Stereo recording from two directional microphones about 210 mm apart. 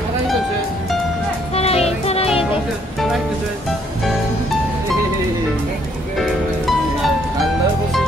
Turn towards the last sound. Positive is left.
turn(degrees=0)  # may be behind; listen again after turning